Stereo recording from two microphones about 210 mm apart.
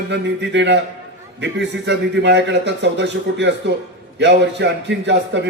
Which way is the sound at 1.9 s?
55° right (ahead or behind).